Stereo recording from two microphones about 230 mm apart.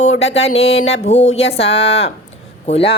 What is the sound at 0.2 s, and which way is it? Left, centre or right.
A woman's voice, left.